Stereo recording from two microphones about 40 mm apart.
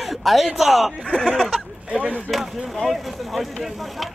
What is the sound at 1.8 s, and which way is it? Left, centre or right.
Speech, right.